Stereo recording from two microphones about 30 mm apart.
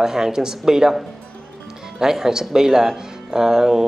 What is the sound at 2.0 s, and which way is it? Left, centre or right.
Speech, centre.